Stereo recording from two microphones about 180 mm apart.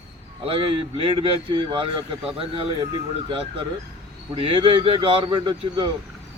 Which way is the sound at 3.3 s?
30° right (ahead or behind).